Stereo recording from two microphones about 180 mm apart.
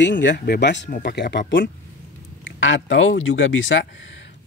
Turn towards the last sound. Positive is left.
turn(degrees=90)